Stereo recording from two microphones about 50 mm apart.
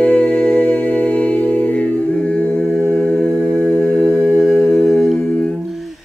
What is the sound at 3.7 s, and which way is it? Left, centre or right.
Mantra, left.